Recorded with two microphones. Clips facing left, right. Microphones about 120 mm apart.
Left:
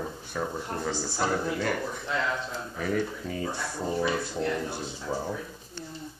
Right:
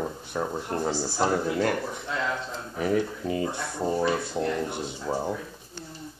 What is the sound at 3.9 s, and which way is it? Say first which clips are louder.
Speech: right 1 dB; 25° right (ahead or behind).